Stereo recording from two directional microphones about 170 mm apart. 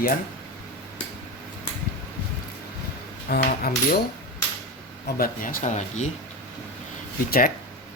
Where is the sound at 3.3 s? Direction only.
65° left (ahead or behind).